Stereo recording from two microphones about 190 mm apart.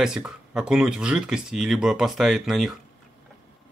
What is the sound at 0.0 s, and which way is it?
Speech, 5° right (ahead or behind).